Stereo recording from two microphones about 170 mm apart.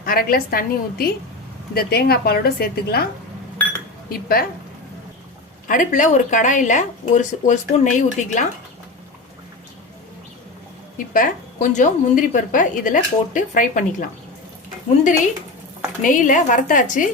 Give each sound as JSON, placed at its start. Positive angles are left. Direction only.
{"t": 0.0, "sound": "a woman's voice", "side_deg": 60}
{"t": 4.1, "sound": "a woman's voice", "side_deg": 60}
{"t": 5.6, "sound": "a woman's voice", "side_deg": 50}
{"t": 10.9, "sound": "a woman's voice", "side_deg": 55}
{"t": 16.0, "sound": "a woman's voice", "side_deg": 50}